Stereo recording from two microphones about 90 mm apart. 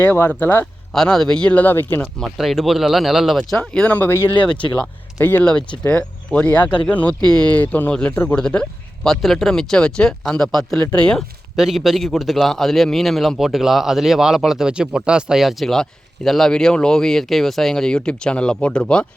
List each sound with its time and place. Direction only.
0.0 s speech: 20° left (ahead or behind)
0.9 s speech: 5° left (ahead or behind); by 2.0 s 25° left (ahead or behind)
2.1 s a man's voice: centre (ahead or behind); by 5.5 s 25° left (ahead or behind)
5.8 s speech: 15° left (ahead or behind)
9.0 s a man's voice: 5° left (ahead or behind)
11.5 s a man's voice: 5° right (ahead or behind)